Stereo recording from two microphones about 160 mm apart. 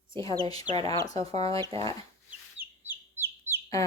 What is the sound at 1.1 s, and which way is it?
Speech, 40° right (ahead or behind).